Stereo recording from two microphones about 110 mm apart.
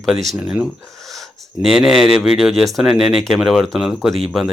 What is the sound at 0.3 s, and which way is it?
Speech, 5° right (ahead or behind).